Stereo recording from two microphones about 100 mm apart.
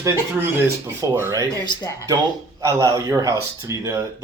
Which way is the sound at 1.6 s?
50° left (ahead or behind).